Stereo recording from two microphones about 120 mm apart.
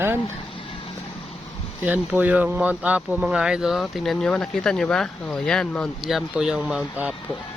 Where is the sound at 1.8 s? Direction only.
10° right (ahead or behind).